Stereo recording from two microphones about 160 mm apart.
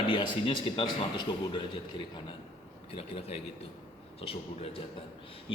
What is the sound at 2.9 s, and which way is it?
A man's voice, 40° left (ahead or behind).